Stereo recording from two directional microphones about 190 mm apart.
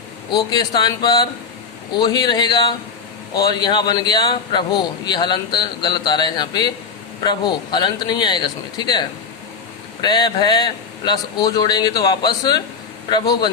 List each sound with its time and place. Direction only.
0.3 s a man's voice: 20° left (ahead or behind)